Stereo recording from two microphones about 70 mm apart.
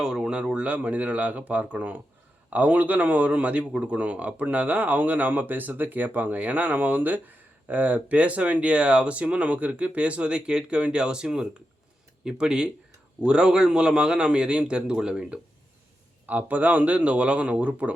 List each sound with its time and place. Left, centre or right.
0.0 s a man's voice: centre
16.2 s a man's voice: right